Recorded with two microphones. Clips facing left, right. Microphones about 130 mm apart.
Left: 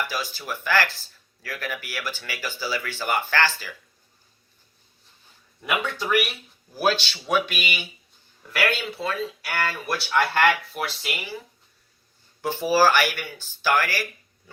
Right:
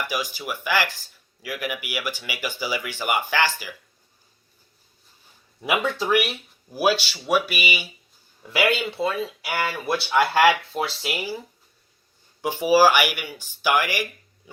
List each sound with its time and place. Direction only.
0.0 s speech: 15° right (ahead or behind)
5.6 s speech: centre (ahead or behind)
10.7 s speech: 25° right (ahead or behind)
12.4 s speech: 15° right (ahead or behind)